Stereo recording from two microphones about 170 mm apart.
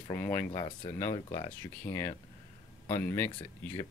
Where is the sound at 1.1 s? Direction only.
30° left (ahead or behind).